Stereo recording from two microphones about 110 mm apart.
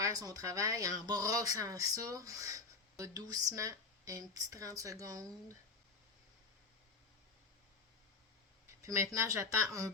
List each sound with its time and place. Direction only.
0.0 s speech: 35° right (ahead or behind)
8.8 s speech: 30° right (ahead or behind)